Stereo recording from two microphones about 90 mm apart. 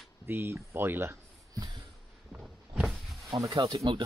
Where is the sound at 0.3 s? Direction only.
25° right (ahead or behind).